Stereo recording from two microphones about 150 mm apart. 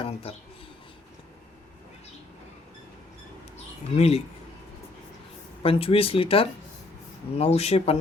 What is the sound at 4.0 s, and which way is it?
Speech, 45° left (ahead or behind).